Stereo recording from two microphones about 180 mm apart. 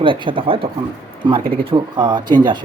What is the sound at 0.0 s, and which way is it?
Speech, 30° right (ahead or behind).